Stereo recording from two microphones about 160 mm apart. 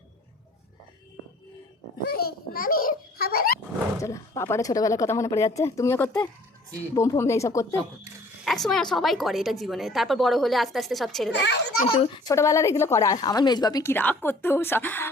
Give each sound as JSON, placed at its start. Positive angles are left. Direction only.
{"t": 2.0, "sound": "babbling", "side_deg": 70}
{"t": 4.0, "sound": "speech", "side_deg": 15}
{"t": 8.4, "sound": "a woman's voice", "side_deg": 0}
{"t": 11.3, "sound": "a child's voice", "side_deg": 90}
{"t": 11.9, "sound": "a child's voice", "side_deg": 30}
{"t": 12.3, "sound": "speech", "side_deg": 20}
{"t": 13.9, "sound": "a woman's voice", "side_deg": 10}